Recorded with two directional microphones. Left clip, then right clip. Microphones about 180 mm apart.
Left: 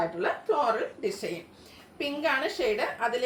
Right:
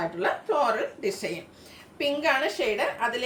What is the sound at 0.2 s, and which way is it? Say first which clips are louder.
A woman's voice: right 4 dB; 15° right (ahead or behind).